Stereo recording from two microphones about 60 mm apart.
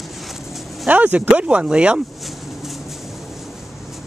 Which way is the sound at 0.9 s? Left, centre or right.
Right.